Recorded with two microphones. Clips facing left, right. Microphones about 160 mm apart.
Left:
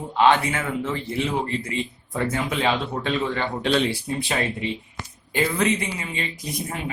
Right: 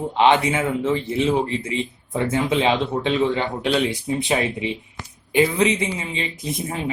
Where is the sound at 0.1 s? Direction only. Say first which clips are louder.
Right 1 dB; 20° right (ahead or behind).